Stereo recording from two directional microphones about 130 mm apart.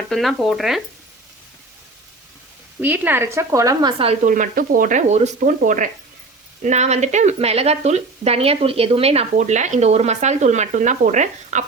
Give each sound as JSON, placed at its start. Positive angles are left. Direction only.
{"t": 0.1, "sound": "speech", "side_deg": 0}
{"t": 2.8, "sound": "speech", "side_deg": -15}
{"t": 3.9, "sound": "speech", "side_deg": -45}
{"t": 4.2, "sound": "speech", "side_deg": -90}
{"t": 6.6, "sound": "speech", "side_deg": -60}